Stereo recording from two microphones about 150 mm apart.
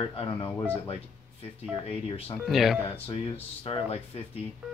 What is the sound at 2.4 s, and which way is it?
Speech, centre (ahead or behind).